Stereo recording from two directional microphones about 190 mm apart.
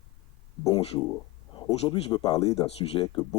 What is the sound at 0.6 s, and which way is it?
Speech, 25° left (ahead or behind).